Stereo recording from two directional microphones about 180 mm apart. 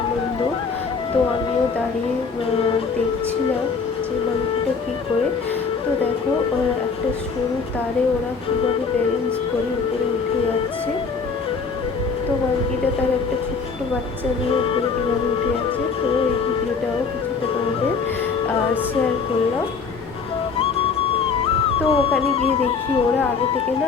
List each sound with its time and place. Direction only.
14.5 s music: 30° left (ahead or behind)
21.4 s speech: 30° left (ahead or behind)